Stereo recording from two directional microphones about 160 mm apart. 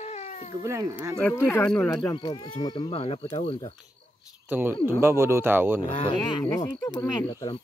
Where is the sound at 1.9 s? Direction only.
25° left (ahead or behind).